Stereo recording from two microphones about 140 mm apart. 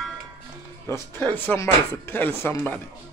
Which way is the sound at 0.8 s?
20° left (ahead or behind).